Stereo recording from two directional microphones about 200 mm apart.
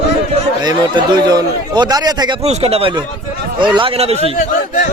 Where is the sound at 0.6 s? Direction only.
20° right (ahead or behind).